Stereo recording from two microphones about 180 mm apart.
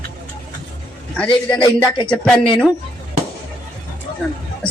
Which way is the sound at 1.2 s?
25° left (ahead or behind).